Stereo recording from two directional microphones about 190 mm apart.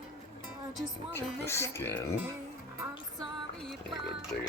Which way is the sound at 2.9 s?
Centre (ahead or behind).